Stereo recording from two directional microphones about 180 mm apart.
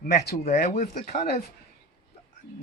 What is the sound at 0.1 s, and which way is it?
Speech, 65° left (ahead or behind).